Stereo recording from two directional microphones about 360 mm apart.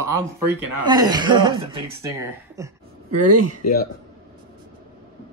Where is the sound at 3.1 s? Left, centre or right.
Right.